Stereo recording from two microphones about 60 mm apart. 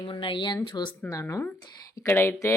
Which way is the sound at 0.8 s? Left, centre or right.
Left.